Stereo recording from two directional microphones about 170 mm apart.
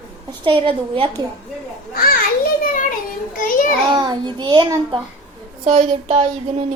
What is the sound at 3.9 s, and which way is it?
A child's voice, 25° right (ahead or behind).